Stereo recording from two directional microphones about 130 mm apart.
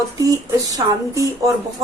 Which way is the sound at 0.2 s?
25° right (ahead or behind).